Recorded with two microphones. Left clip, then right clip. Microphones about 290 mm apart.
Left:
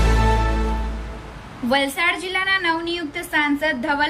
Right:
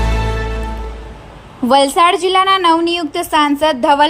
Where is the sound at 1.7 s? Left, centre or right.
Centre.